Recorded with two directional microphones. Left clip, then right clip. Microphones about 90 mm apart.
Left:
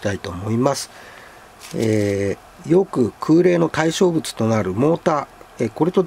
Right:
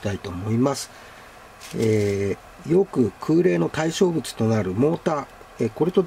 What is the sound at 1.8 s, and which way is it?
Speech, 65° left (ahead or behind).